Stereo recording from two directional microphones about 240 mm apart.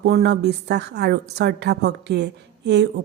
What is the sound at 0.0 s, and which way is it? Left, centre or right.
A woman's voice, right.